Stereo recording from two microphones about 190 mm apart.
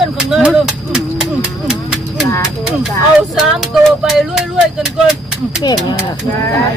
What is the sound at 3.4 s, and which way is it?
Speech, centre (ahead or behind).